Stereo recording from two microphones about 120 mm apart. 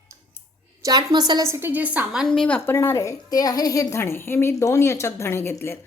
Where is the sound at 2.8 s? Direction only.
25° left (ahead or behind).